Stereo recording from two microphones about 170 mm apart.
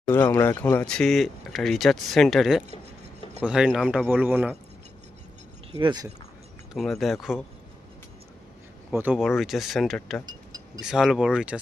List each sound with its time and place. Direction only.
0.1 s speech: 10° left (ahead or behind); by 4.5 s 10° right (ahead or behind)
5.8 s speech: 25° right (ahead or behind)
6.7 s speech: centre (ahead or behind)
8.9 s speech: 10° right (ahead or behind)
9.1 s speech: centre (ahead or behind)